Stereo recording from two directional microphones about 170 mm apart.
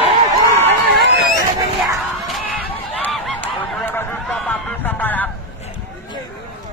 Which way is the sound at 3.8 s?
10° left (ahead or behind).